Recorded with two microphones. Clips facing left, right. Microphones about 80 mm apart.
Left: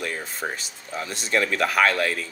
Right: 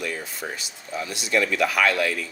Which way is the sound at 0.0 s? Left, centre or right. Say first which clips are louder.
Left 1 dB; left.